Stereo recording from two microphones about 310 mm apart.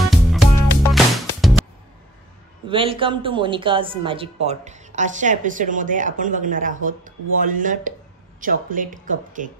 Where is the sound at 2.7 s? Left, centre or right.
Centre.